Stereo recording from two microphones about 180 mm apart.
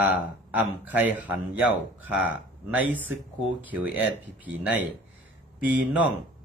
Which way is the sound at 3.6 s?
10° right (ahead or behind).